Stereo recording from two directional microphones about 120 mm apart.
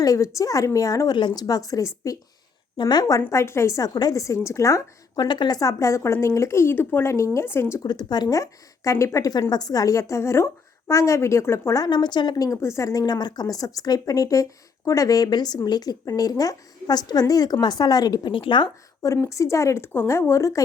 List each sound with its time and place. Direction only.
0.0 s a woman's voice: 30° left (ahead or behind)
7.9 s a woman's voice: 35° left (ahead or behind)
19.0 s a woman's voice: 25° left (ahead or behind)